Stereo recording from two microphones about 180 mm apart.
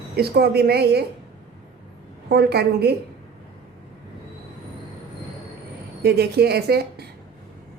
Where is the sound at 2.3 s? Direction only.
65° right (ahead or behind).